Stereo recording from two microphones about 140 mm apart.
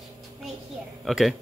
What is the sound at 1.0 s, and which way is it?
Speech, centre (ahead or behind).